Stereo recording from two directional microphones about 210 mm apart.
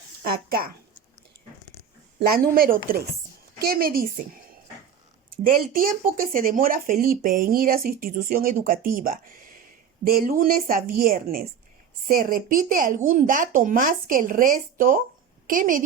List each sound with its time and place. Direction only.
0.3 s speech: 45° right (ahead or behind)
2.1 s speech: 45° right (ahead or behind)
5.4 s speech: 40° right (ahead or behind)